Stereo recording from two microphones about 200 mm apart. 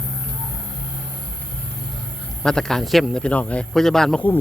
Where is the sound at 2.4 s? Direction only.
5° left (ahead or behind).